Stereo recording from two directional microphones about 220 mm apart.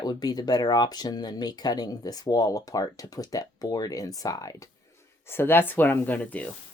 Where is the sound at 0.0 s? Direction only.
15° left (ahead or behind).